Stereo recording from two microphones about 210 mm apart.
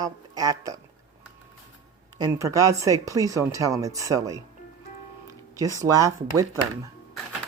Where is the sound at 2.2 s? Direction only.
15° right (ahead or behind).